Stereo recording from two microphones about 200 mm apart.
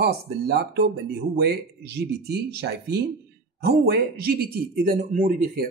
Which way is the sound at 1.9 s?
55° right (ahead or behind).